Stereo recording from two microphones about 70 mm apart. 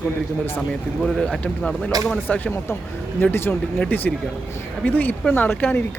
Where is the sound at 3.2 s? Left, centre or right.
Left.